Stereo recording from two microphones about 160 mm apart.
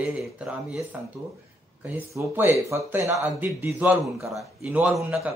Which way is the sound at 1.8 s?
15° right (ahead or behind).